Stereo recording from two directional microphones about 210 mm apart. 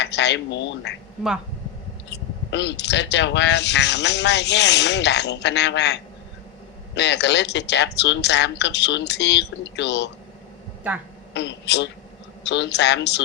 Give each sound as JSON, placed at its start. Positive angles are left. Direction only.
{"t": 0.0, "sound": "speech", "side_deg": 55}
{"t": 2.0, "sound": "speech", "side_deg": 55}
{"t": 11.3, "sound": "speech", "side_deg": 55}